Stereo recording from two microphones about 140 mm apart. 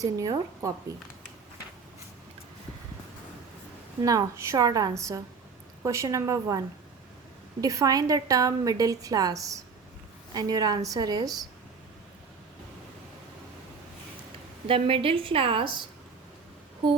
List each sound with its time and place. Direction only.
0.0 s a woman's voice: 25° right (ahead or behind)
4.0 s a woman's voice: 25° right (ahead or behind)
7.6 s a woman's voice: 25° right (ahead or behind)
14.7 s a woman's voice: 40° right (ahead or behind)